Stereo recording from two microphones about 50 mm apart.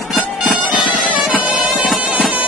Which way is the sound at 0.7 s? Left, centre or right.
Right.